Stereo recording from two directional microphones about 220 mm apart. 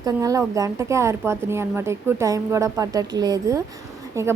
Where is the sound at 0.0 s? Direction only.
15° right (ahead or behind).